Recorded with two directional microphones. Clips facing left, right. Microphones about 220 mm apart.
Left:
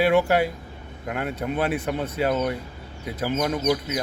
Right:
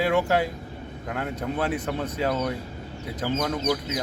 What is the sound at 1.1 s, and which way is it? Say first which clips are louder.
Speech: left 2 dB; 15° left (ahead or behind).